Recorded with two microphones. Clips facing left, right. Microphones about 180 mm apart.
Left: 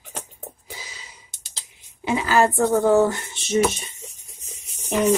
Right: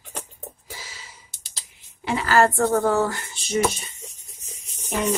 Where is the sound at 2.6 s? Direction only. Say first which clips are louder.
Left 3 dB; 20° left (ahead or behind).